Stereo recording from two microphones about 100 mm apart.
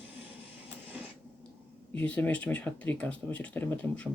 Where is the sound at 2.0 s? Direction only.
15° left (ahead or behind).